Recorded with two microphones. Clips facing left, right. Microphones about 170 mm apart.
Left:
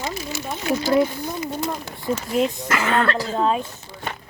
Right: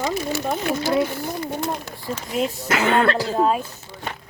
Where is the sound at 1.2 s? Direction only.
60° right (ahead or behind).